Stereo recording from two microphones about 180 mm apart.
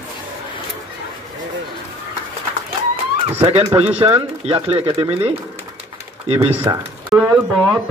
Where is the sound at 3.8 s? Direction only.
30° right (ahead or behind).